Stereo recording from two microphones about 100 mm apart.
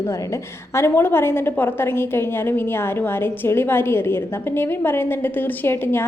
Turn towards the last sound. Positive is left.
turn(degrees=25)  # may be behind; listen again after turning